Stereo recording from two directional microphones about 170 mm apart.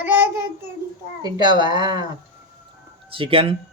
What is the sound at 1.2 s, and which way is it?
Speech, 25° right (ahead or behind).